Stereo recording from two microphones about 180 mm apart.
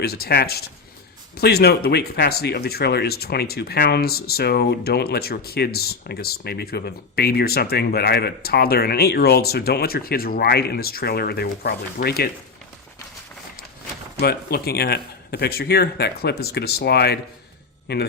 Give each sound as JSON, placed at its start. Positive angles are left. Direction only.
{"t": 0.0, "sound": "speech", "side_deg": 60}
{"t": 14.2, "sound": "speech", "side_deg": 60}